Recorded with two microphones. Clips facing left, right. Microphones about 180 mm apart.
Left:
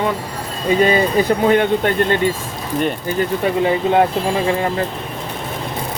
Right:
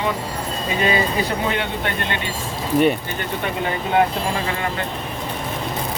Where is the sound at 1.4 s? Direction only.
45° left (ahead or behind).